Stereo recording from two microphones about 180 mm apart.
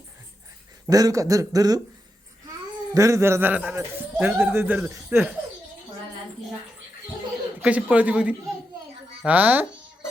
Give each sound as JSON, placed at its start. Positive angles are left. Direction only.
{"t": 0.9, "sound": "speech", "side_deg": -20}
{"t": 2.9, "sound": "a man's voice", "side_deg": -15}
{"t": 7.6, "sound": "a man's voice", "side_deg": -5}